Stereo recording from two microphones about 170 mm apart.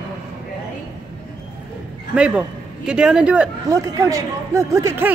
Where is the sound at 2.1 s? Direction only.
5° right (ahead or behind).